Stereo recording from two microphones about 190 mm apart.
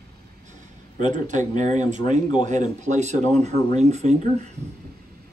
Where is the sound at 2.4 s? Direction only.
40° right (ahead or behind).